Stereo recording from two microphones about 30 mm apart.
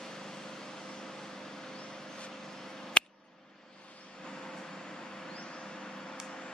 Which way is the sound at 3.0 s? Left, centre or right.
Left.